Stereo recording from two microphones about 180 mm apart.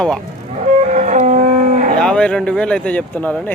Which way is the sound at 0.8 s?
40° right (ahead or behind).